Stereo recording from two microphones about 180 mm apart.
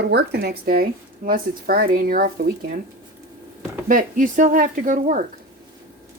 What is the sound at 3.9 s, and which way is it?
Speech, 50° right (ahead or behind).